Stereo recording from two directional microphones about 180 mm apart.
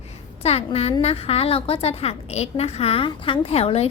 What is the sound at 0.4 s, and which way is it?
A woman's voice, 35° left (ahead or behind).